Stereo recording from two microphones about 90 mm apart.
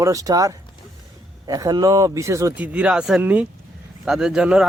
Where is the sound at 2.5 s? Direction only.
15° right (ahead or behind).